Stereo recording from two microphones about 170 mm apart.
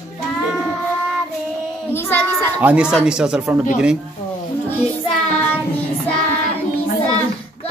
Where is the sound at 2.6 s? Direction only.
5° right (ahead or behind).